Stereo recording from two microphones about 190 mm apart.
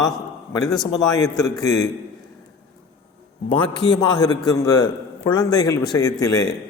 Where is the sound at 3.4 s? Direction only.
25° left (ahead or behind).